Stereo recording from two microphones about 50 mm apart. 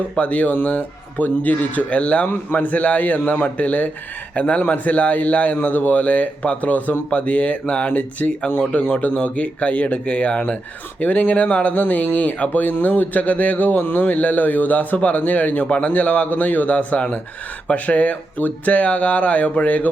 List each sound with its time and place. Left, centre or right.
0.2 s speech: left